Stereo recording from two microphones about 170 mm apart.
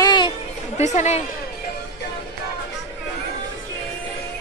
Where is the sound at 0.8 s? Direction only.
40° left (ahead or behind).